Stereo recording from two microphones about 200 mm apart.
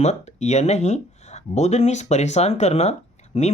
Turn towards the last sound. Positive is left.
turn(degrees=35)  # may be behind; listen again after turning